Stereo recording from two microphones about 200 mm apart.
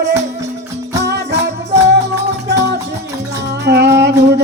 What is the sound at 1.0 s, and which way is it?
Music, 60° right (ahead or behind).